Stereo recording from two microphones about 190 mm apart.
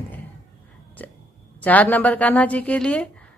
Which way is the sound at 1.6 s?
10° left (ahead or behind).